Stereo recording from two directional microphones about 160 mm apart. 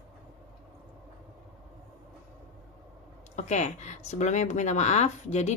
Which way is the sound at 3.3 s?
45° left (ahead or behind).